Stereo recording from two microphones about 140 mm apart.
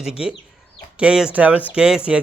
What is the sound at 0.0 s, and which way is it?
A man's voice, 5° right (ahead or behind).